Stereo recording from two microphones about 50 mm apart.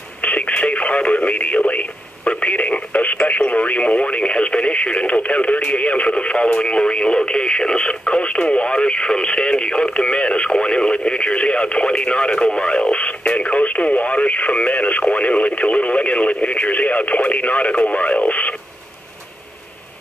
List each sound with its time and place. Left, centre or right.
0.2 s radio: left
1.7 s speech: left